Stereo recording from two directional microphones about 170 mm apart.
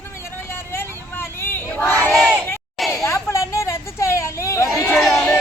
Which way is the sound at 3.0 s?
15° left (ahead or behind).